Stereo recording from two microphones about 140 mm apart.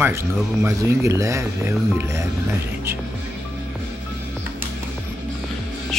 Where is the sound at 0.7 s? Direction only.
20° right (ahead or behind).